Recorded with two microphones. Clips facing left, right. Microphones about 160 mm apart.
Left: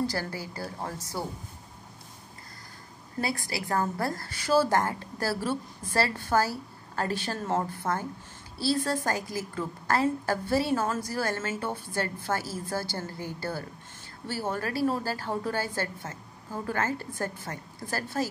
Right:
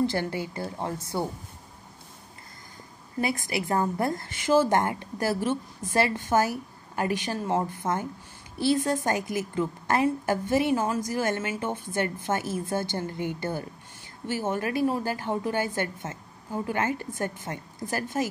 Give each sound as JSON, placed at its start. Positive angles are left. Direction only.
{"t": 0.0, "sound": "a woman's voice", "side_deg": -25}
{"t": 3.2, "sound": "a woman's voice", "side_deg": -20}